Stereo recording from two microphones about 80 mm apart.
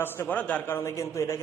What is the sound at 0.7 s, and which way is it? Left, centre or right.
Speech, left.